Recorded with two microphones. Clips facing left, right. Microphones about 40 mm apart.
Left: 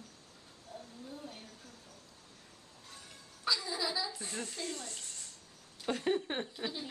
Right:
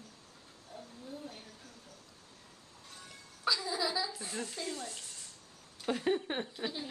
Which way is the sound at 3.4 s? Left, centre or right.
Centre.